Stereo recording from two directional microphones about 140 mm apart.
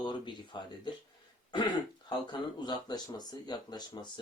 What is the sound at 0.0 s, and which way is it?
Speech, 35° left (ahead or behind).